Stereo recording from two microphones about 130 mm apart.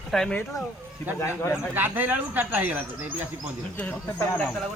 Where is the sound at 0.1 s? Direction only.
5° left (ahead or behind).